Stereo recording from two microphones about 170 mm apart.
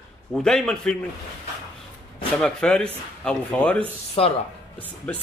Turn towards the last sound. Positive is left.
turn(degrees=5)  # may be behind; listen again after turning